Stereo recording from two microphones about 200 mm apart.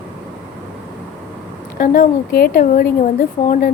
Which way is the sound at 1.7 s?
45° left (ahead or behind).